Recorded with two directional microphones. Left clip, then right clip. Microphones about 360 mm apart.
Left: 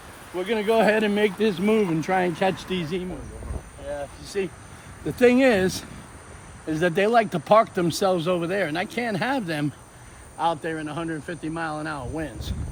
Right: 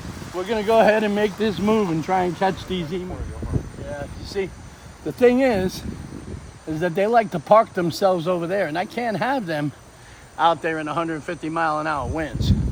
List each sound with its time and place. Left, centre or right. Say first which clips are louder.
0.3 s speech: right 4 dB; centre
4.4 s speech: right 1 dB; centre
10.3 s speech: right 6 dB; right